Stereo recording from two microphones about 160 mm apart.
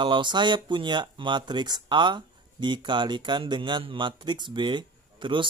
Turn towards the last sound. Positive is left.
turn(degrees=-30)  # may be behind; listen again after turning